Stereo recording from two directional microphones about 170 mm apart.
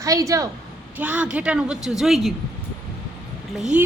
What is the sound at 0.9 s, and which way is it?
A woman's voice, 10° right (ahead or behind).